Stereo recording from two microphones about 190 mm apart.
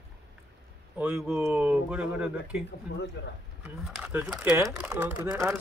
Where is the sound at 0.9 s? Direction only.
5° right (ahead or behind).